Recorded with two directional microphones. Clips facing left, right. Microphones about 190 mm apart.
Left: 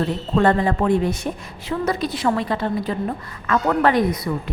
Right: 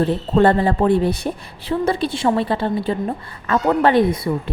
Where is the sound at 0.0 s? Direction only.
30° right (ahead or behind).